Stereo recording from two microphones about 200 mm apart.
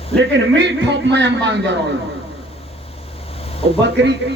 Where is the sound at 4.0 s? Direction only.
60° right (ahead or behind).